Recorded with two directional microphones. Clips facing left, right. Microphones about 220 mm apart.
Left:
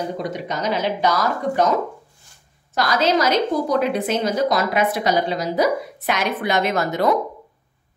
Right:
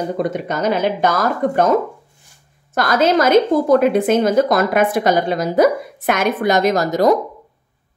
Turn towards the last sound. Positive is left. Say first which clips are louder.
# right 5 dB
turn(degrees=-40)  # may be behind; listen again after turning